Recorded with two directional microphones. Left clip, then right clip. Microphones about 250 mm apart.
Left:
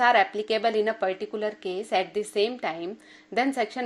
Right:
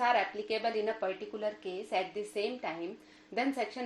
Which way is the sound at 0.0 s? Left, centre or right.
Left.